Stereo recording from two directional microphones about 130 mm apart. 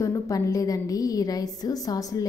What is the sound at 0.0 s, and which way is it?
A woman's voice, 25° left (ahead or behind).